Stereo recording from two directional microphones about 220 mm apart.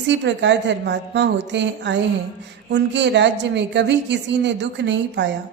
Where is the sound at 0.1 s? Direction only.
55° right (ahead or behind).